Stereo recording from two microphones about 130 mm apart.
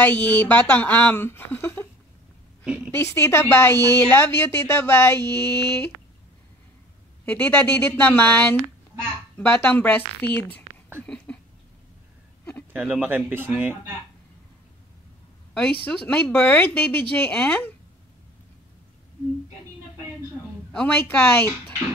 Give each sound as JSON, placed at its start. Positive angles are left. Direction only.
{"t": 0.0, "sound": "speech", "side_deg": 10}
{"t": 2.6, "sound": "a woman's voice", "side_deg": -5}
{"t": 2.9, "sound": "speech", "side_deg": 20}
{"t": 7.2, "sound": "speech", "side_deg": 15}
{"t": 11.1, "sound": "a sound", "side_deg": 10}
{"t": 12.7, "sound": "speech", "side_deg": -10}
{"t": 15.5, "sound": "speech", "side_deg": 10}
{"t": 20.7, "sound": "speech", "side_deg": 10}